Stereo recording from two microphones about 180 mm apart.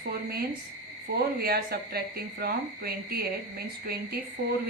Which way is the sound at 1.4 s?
60° right (ahead or behind).